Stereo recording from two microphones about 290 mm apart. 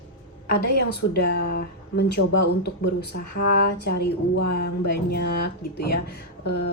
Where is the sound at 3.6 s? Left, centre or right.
Left.